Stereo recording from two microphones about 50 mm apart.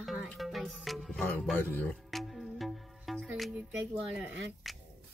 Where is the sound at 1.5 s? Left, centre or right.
Left.